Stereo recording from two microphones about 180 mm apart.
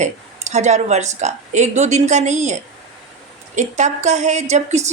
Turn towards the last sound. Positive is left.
turn(degrees=-40)  # may be behind; listen again after turning